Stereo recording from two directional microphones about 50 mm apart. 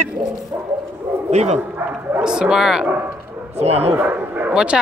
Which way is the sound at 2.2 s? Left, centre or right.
Centre.